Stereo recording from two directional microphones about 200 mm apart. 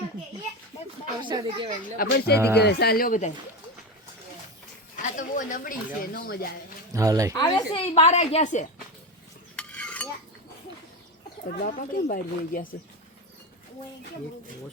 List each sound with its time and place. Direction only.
0.7 s a sound: 30° left (ahead or behind)
1.2 s speech: 25° right (ahead or behind)
2.0 s speech: 50° left (ahead or behind)
5.0 s speech: 40° left (ahead or behind)
6.9 s speech: 15° right (ahead or behind)
7.3 s a woman's voice: 20° left (ahead or behind)
9.6 s cutlery: 5° left (ahead or behind)
11.4 s speech: 40° left (ahead or behind)